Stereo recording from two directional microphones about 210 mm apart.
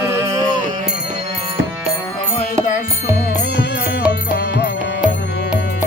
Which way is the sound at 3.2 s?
50° left (ahead or behind).